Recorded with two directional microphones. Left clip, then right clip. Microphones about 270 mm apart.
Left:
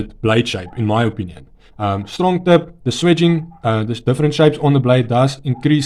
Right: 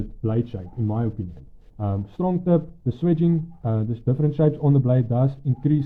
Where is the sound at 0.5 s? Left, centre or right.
Left.